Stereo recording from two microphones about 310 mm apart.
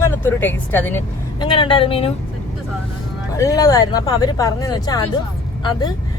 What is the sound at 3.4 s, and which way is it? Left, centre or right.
Speech, centre.